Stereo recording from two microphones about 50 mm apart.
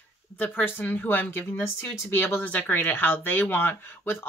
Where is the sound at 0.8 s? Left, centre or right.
Left.